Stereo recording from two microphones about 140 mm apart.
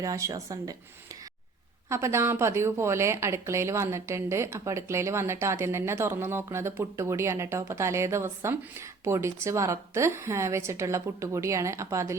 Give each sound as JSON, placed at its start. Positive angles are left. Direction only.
{"t": 0.0, "sound": "a woman's voice", "side_deg": -25}
{"t": 1.9, "sound": "a woman's voice", "side_deg": -20}